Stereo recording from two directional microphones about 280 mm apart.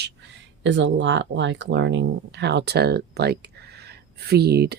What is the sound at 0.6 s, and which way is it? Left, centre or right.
Speech, right.